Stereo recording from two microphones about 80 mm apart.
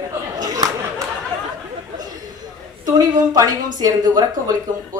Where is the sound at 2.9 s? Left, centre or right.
Right.